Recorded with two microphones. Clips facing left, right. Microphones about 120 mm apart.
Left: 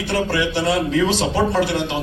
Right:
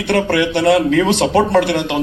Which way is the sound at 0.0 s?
65° right (ahead or behind).